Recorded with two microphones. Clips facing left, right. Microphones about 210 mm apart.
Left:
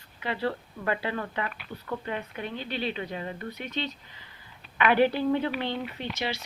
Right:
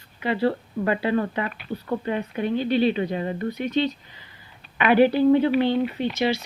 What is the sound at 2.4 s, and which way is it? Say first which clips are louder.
Speech: right 16 dB; 40° right (ahead or behind).